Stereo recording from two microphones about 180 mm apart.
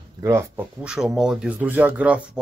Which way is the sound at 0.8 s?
5° right (ahead or behind).